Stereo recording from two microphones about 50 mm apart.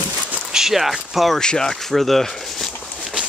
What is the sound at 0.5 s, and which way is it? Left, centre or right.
Speech, centre.